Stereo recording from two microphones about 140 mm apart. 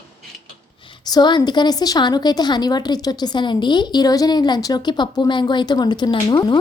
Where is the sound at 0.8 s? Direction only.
30° left (ahead or behind).